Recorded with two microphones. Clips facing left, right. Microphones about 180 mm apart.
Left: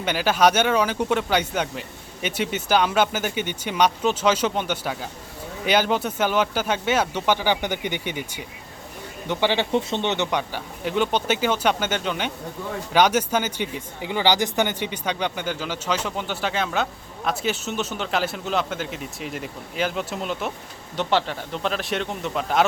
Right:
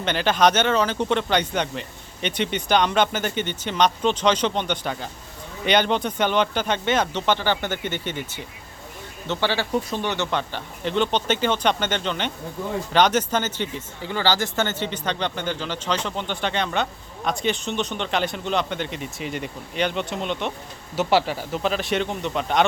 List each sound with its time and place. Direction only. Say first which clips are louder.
0.0 s speech: even; 10° left (ahead or behind)
20.9 s speech: right 2 dB; 5° right (ahead or behind)